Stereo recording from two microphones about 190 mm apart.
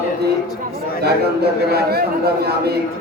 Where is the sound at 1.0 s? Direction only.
55° right (ahead or behind).